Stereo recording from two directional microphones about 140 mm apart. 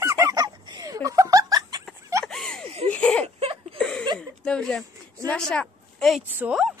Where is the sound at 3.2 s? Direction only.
45° right (ahead or behind).